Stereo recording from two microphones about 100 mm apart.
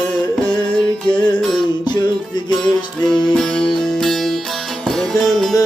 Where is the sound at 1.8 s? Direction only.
45° left (ahead or behind).